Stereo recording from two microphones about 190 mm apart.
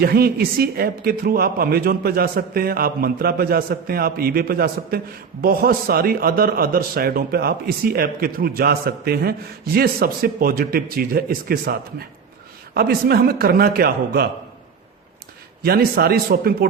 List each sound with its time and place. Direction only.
0.0 s a man's voice: 50° right (ahead or behind)
15.6 s a man's voice: 55° right (ahead or behind)